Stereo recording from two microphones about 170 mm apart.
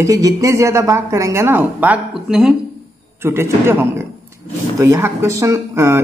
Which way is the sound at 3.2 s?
15° right (ahead or behind).